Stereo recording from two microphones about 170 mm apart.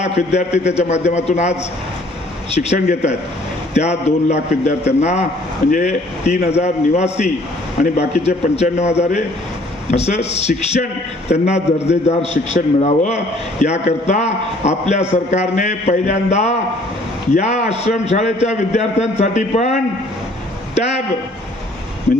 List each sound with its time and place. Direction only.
0.0 s a man's voice: 40° left (ahead or behind)